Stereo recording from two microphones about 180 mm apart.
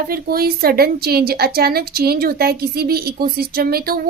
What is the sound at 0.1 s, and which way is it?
A woman's voice, 55° right (ahead or behind).